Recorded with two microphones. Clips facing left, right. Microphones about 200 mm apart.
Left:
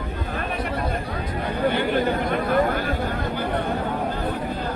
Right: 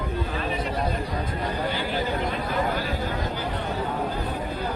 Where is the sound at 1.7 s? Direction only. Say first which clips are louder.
Left 5 dB; 60° left (ahead or behind).